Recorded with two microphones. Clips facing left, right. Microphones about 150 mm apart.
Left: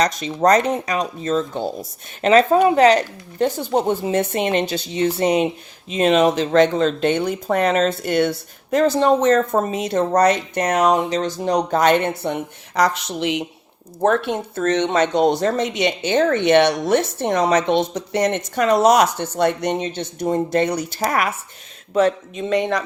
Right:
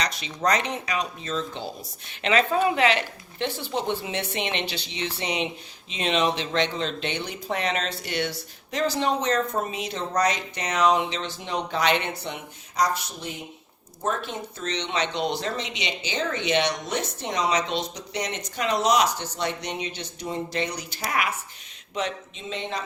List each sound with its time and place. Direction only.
0.0 s speech: 45° left (ahead or behind); by 13.4 s 90° left
14.0 s a woman's voice: 65° left (ahead or behind)